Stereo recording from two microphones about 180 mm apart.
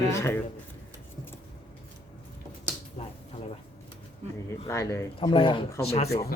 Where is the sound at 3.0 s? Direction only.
45° left (ahead or behind).